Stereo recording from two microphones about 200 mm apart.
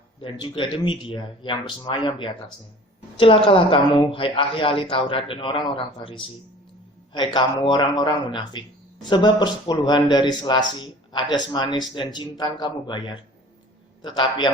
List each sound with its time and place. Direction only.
0.2 s speech: 25° left (ahead or behind)
7.3 s speech: 20° left (ahead or behind)